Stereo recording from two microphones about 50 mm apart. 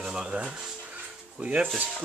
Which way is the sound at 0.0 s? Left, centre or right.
Centre.